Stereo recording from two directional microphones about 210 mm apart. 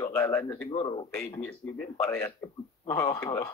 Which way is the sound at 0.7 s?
25° left (ahead or behind).